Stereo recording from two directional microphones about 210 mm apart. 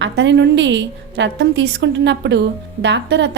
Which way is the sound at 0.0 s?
55° right (ahead or behind).